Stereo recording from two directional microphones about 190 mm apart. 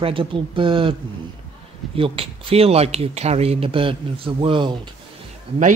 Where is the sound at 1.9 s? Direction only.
30° right (ahead or behind).